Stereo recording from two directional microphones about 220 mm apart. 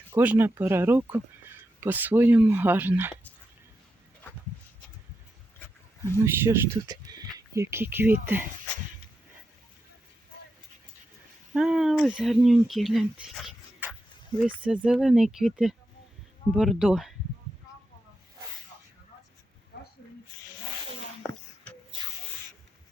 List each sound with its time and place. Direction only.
0.1 s speech: 10° right (ahead or behind)
6.2 s speech: 10° right (ahead or behind)
11.5 s speech: 5° right (ahead or behind)
19.7 s a sound: 50° left (ahead or behind)